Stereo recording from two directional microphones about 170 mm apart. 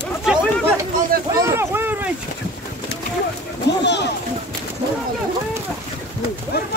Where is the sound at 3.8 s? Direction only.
90° left.